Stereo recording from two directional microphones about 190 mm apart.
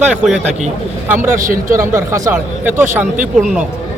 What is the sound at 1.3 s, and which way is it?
Speech, 45° right (ahead or behind).